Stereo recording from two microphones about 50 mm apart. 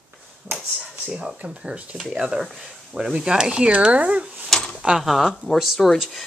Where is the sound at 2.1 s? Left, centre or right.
Centre.